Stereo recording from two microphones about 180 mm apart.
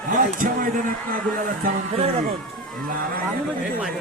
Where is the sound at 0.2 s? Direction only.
50° right (ahead or behind).